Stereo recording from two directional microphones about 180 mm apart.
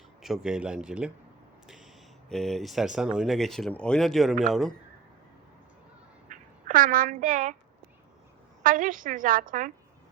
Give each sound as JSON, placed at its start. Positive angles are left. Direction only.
{"t": 0.2, "sound": "speech", "side_deg": -5}
{"t": 2.3, "sound": "speech", "side_deg": 0}
{"t": 6.2, "sound": "duck", "side_deg": -45}
{"t": 8.6, "sound": "a woman's voice", "side_deg": -50}